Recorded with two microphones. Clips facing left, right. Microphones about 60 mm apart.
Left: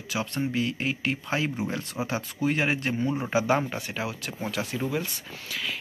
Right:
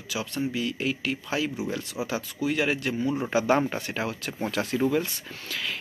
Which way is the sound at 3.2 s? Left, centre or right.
Centre.